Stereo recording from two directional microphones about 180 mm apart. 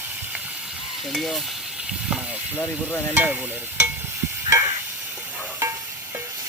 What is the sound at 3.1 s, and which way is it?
Stir, 10° right (ahead or behind).